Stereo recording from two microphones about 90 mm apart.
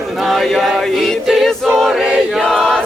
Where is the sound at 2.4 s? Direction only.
5° left (ahead or behind).